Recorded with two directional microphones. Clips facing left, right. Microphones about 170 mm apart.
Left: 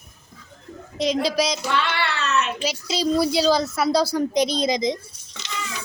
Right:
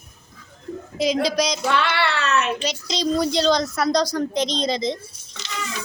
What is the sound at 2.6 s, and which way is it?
A woman's voice, 5° left (ahead or behind).